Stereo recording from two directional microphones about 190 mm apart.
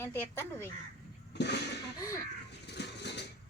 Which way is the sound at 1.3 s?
60° left (ahead or behind).